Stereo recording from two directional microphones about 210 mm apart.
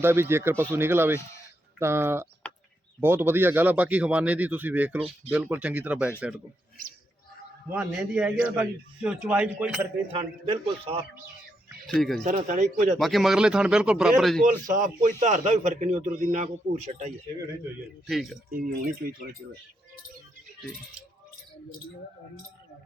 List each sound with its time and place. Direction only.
0.0 s a man's voice: 10° right (ahead or behind)
7.7 s a man's voice: 5° right (ahead or behind)
10.2 s a man's voice: 25° right (ahead or behind)
11.9 s speech: 5° left (ahead or behind)
12.2 s a man's voice: 35° right (ahead or behind)
13.0 s speech: centre (ahead or behind)
14.7 s a man's voice: 35° right (ahead or behind)
18.0 s speech: centre (ahead or behind)
18.5 s speech: 40° right (ahead or behind)